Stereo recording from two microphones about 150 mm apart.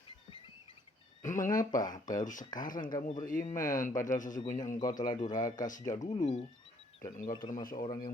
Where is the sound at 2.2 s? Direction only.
60° left (ahead or behind).